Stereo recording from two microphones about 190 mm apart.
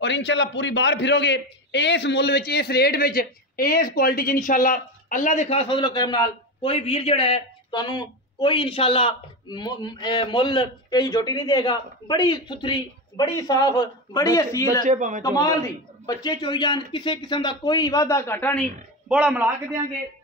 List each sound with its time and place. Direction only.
0.0 s a man's voice: 70° left (ahead or behind); by 14.8 s 15° left (ahead or behind)
14.8 s a man's voice: 40° right (ahead or behind)
15.2 s a man's voice: 20° left (ahead or behind)
19.0 s a man's voice: 10° right (ahead or behind)